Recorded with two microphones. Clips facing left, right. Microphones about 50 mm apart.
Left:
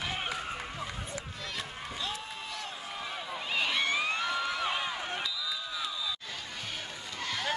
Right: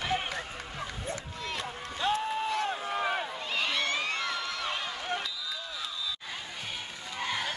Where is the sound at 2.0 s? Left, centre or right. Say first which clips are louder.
Right 12 dB; right.